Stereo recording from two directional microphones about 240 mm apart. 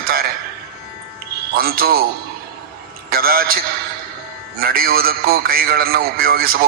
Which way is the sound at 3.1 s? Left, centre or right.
Right.